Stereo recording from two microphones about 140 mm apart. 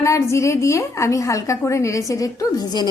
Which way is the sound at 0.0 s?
20° left (ahead or behind).